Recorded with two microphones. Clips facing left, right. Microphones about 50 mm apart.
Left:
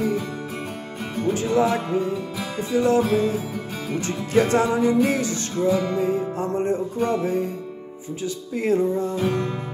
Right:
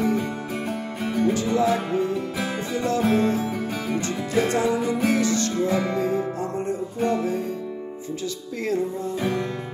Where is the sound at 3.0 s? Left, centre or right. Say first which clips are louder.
Even; right.